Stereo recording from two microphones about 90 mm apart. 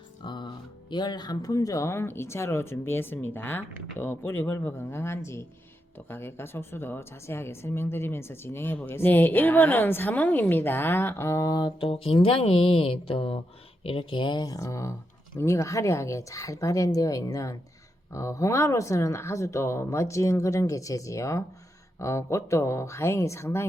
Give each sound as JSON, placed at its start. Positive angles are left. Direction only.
{"t": 0.3, "sound": "speech", "side_deg": 60}
{"t": 11.8, "sound": "speech", "side_deg": 85}
{"t": 14.4, "sound": "speech", "side_deg": 40}